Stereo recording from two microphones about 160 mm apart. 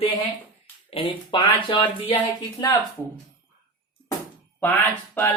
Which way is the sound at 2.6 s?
25° left (ahead or behind).